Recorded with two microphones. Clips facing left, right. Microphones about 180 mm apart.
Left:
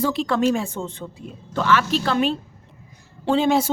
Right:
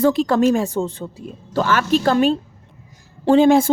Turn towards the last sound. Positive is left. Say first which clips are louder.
# right 6 dB
turn(degrees=-50)  # may be behind; listen again after turning